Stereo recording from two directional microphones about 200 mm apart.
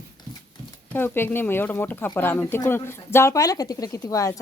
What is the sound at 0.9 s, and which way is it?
Speech, 10° left (ahead or behind).